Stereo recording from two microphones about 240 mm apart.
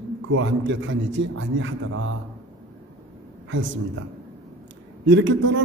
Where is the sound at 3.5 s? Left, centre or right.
Right.